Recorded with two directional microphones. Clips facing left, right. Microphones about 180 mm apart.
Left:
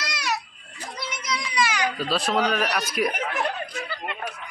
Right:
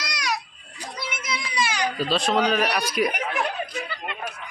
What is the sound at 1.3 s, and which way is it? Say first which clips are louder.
Baby cry: left 2 dB; 30° right (ahead or behind).